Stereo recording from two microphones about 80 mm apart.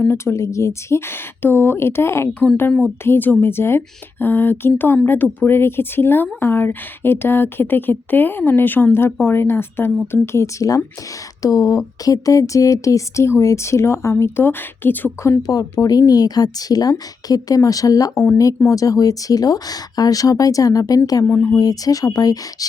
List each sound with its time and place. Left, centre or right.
0.0 s a woman's voice: left
15.5 s speech: left